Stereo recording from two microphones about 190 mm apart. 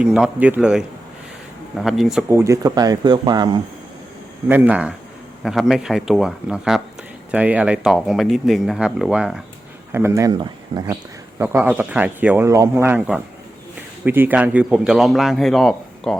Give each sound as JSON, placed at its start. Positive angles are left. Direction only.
{"t": 0.0, "sound": "a man's voice", "side_deg": -5}
{"t": 2.3, "sound": "speech", "side_deg": -15}
{"t": 4.4, "sound": "a man's voice", "side_deg": -10}
{"t": 9.9, "sound": "speech", "side_deg": -15}
{"t": 11.3, "sound": "a man's voice", "side_deg": -10}